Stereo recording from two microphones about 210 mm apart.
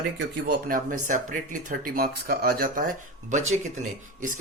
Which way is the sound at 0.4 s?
40° right (ahead or behind).